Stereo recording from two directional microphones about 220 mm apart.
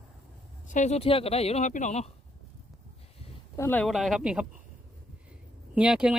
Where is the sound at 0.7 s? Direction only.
30° left (ahead or behind).